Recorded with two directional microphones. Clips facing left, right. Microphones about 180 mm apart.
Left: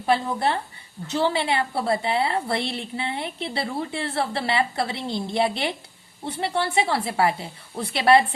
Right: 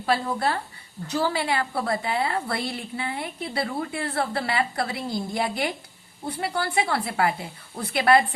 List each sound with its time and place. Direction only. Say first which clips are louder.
0.0 s a woman's voice: left 2 dB; 20° left (ahead or behind)